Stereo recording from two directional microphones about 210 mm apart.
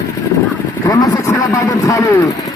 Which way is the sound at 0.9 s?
15° left (ahead or behind).